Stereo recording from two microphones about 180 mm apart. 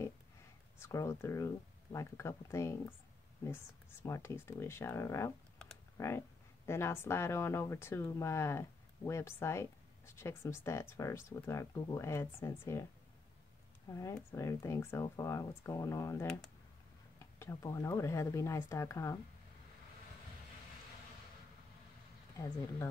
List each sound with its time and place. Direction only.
0.7 s speech: 15° left (ahead or behind)
4.0 s speech: 15° left (ahead or behind)
13.8 s speech: 15° left (ahead or behind)